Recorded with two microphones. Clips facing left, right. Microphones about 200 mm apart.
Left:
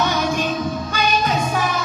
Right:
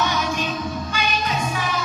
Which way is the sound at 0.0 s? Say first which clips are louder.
Left 3 dB; 45° left (ahead or behind).